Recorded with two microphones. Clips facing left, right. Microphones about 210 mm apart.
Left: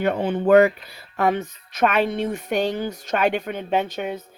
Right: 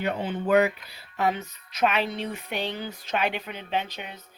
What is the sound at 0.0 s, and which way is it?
Speech, 50° left (ahead or behind).